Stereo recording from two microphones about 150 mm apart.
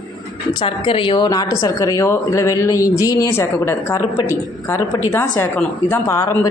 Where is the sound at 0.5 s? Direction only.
35° left (ahead or behind).